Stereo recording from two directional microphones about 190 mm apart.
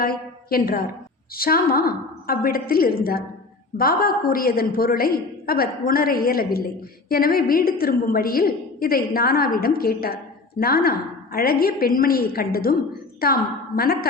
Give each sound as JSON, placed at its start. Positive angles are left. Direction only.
{"t": 0.0, "sound": "a woman's voice", "side_deg": 50}